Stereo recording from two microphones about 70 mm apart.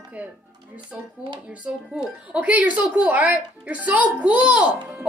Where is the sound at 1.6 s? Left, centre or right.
Centre.